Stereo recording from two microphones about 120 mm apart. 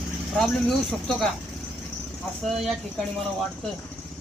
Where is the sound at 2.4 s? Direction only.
Centre (ahead or behind).